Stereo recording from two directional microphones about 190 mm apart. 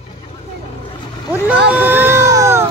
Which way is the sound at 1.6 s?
10° right (ahead or behind).